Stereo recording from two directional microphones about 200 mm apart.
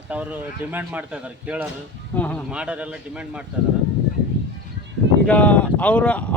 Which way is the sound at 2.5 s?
5° right (ahead or behind).